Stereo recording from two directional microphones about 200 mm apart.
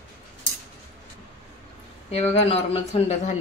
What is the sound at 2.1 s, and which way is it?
Speech, 30° left (ahead or behind).